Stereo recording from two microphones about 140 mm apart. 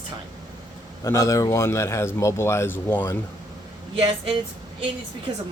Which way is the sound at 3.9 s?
40° right (ahead or behind).